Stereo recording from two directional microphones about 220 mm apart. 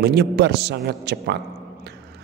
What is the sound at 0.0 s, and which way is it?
A man's voice, 50° right (ahead or behind).